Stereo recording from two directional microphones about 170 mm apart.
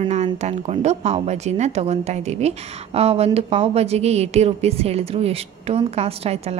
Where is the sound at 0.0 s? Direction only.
40° right (ahead or behind).